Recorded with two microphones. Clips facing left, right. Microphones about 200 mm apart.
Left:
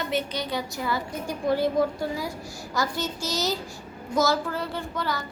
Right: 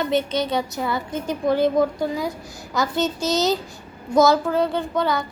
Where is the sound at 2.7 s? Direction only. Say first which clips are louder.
Right 6 dB; 20° right (ahead or behind).